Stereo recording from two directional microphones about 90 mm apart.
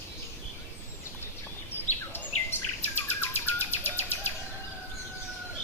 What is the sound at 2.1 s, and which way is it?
Bird, 25° left (ahead or behind).